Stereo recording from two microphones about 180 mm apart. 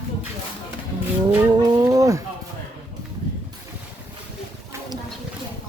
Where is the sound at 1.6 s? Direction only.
20° right (ahead or behind).